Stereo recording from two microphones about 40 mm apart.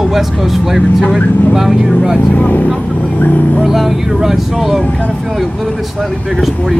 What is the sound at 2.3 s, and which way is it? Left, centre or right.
Speech, left.